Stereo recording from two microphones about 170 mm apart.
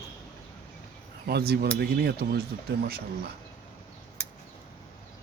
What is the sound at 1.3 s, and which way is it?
A man's voice, 70° right (ahead or behind).